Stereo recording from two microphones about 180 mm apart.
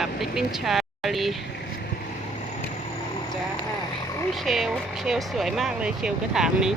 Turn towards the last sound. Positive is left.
turn(degrees=-5)  # may be behind; listen again after turning